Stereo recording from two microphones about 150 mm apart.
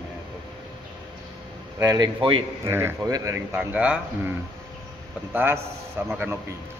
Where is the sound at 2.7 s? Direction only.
15° right (ahead or behind).